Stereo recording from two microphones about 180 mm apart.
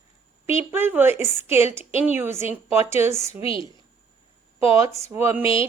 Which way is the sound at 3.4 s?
30° left (ahead or behind).